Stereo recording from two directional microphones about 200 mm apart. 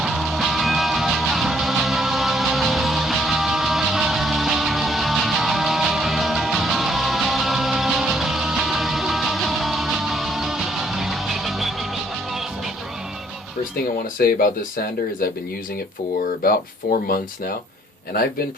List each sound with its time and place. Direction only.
0.0 s music: centre (ahead or behind)
14.2 s speech: 45° left (ahead or behind)
16.4 s speech: 45° left (ahead or behind)